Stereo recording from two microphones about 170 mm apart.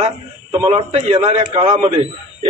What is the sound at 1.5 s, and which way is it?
Speech, 25° right (ahead or behind).